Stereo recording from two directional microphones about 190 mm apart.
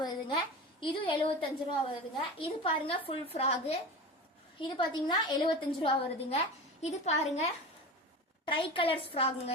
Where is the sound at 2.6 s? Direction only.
30° left (ahead or behind).